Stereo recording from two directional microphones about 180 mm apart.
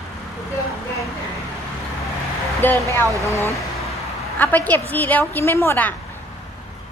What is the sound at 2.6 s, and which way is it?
Speech, 10° left (ahead or behind).